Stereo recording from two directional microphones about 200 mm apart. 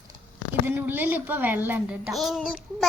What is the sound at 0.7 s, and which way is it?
A child's voice, 10° right (ahead or behind).